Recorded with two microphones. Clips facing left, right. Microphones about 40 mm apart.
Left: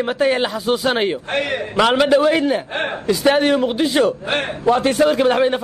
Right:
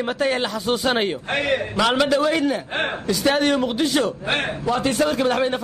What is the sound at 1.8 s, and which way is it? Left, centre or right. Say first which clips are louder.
Speech: left 6 dB; centre.